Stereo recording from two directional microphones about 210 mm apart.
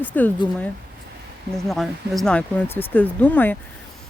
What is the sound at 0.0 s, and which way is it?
Speech, 10° left (ahead or behind).